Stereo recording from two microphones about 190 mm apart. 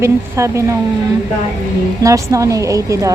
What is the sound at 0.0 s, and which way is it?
Speech, 15° right (ahead or behind).